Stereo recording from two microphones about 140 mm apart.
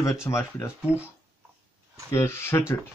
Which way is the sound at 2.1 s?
15° left (ahead or behind).